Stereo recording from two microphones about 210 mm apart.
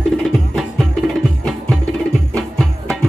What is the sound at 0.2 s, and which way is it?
Music, centre (ahead or behind).